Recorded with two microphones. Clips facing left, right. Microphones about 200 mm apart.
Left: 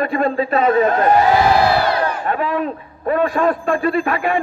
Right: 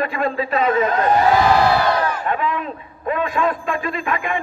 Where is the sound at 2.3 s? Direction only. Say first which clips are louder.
Left 2 dB; 40° left (ahead or behind).